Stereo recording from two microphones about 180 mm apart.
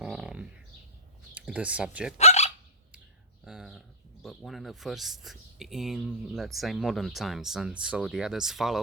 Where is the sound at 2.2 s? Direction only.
35° left (ahead or behind).